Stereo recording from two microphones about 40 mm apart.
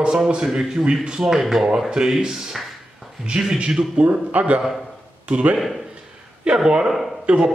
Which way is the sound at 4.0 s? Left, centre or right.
Right.